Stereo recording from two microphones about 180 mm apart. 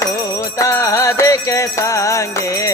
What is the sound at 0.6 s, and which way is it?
Music, 20° left (ahead or behind).